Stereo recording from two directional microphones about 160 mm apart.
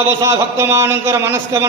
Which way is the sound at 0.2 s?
20° right (ahead or behind).